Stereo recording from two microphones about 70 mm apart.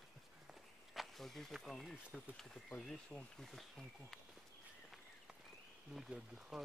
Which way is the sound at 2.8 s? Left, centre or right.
Centre.